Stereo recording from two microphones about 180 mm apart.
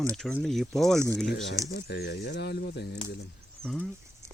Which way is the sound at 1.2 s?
70° left (ahead or behind).